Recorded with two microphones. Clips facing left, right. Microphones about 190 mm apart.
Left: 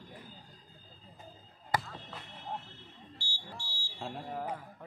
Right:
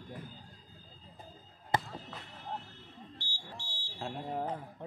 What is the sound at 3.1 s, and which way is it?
Smoke detector, 20° right (ahead or behind).